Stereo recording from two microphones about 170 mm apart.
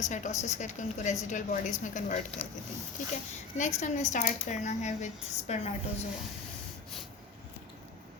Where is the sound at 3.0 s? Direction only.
45° left (ahead or behind).